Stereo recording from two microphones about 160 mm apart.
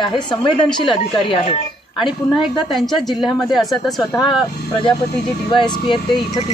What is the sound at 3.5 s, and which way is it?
Speech, centre (ahead or behind).